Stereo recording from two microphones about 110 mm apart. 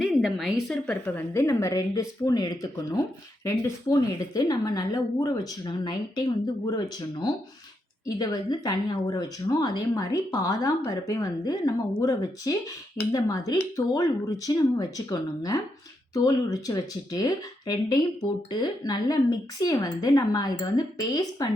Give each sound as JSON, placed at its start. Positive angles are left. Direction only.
{"t": 0.0, "sound": "a woman's voice", "side_deg": -5}
{"t": 0.9, "sound": "a woman's voice", "side_deg": 10}
{"t": 1.3, "sound": "a woman's voice", "side_deg": 25}